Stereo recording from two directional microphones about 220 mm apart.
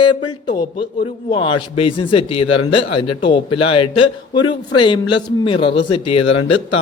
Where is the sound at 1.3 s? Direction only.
25° left (ahead or behind).